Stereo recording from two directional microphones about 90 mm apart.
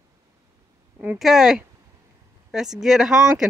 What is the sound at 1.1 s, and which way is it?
Speech, 5° right (ahead or behind).